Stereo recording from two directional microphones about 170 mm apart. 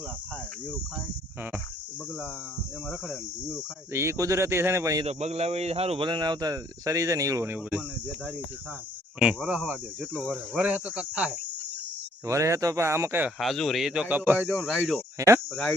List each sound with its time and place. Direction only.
3.9 s speech: 15° right (ahead or behind)
5.0 s speech: 40° right (ahead or behind); by 9.7 s 10° right (ahead or behind)
10.0 s speech: 5° left (ahead or behind)
10.2 s speech: 5° right (ahead or behind)
13.4 s speech: centre (ahead or behind)